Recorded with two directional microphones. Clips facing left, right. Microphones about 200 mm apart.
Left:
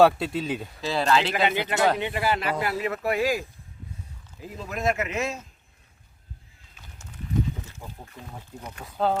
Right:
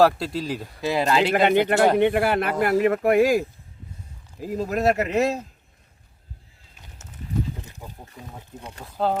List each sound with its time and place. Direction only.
0.0 s speech: centre (ahead or behind)
0.8 s speech: 15° right (ahead or behind)
1.2 s speech: 50° right (ahead or behind)
4.4 s speech: 40° right (ahead or behind)
6.8 s livestock: 20° right (ahead or behind)
8.8 s speech: centre (ahead or behind)